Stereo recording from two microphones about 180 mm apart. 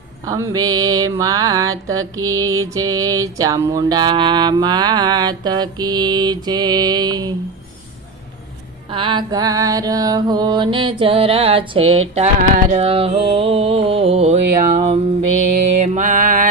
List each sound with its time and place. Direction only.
0.3 s mantra: 15° right (ahead or behind)
8.9 s mantra: 25° right (ahead or behind); by 12.8 s 45° right (ahead or behind)
12.8 s music: 30° right (ahead or behind); by 16.5 s 50° right (ahead or behind)